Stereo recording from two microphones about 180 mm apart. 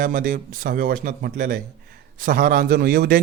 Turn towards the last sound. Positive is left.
turn(degrees=-55)  # may be behind; listen again after turning